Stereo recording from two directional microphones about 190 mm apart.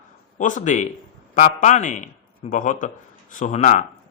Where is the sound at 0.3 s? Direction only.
45° left (ahead or behind).